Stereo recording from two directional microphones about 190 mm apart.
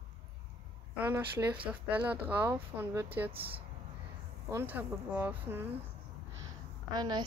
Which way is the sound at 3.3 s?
30° right (ahead or behind).